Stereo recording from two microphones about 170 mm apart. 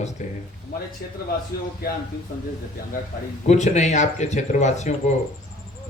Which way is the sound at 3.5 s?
45° left (ahead or behind).